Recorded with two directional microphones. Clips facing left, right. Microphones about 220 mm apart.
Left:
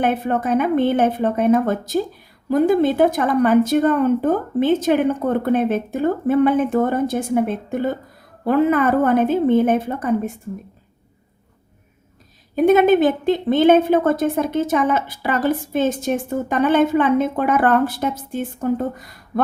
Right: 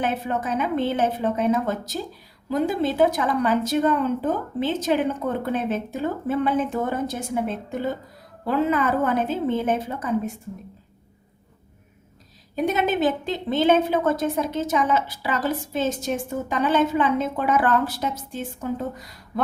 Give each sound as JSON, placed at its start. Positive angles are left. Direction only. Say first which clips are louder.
{"t": 0.0, "sound": "a woman's voice", "louder": "left 6 dB", "side_deg": 55}
{"t": 12.5, "sound": "a woman's voice", "louder": "left 9 dB", "side_deg": 55}